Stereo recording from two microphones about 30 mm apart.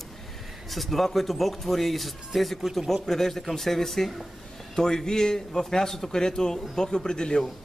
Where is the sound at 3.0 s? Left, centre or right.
Centre.